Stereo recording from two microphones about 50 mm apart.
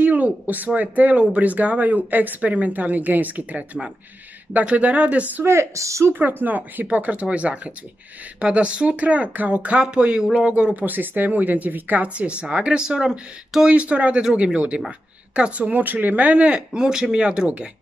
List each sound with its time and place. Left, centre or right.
0.0 s a sound: right
0.7 s speech: right
5.4 s speech: right
6.1 s speech: right
10.8 s speech: right